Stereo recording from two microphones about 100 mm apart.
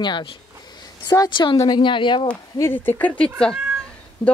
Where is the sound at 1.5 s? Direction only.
40° left (ahead or behind).